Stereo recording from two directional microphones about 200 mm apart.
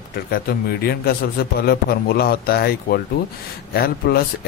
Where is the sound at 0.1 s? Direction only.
50° left (ahead or behind).